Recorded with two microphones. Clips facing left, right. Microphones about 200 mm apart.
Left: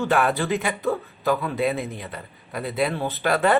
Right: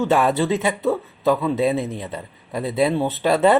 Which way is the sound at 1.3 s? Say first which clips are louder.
Right 4 dB; 25° right (ahead or behind).